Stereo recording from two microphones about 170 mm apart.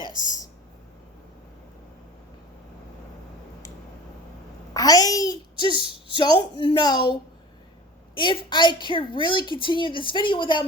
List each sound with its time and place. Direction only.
4.7 s a child's voice: 20° left (ahead or behind)